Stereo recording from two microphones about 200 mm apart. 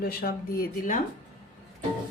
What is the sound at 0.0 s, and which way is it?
Speech, 50° left (ahead or behind).